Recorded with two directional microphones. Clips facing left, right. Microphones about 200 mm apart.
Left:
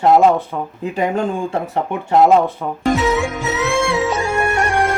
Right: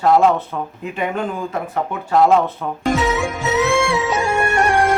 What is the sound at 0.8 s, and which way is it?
Speech, 35° left (ahead or behind).